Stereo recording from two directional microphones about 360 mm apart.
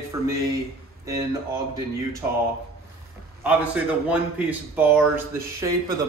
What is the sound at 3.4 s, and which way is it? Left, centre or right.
A man's voice, centre.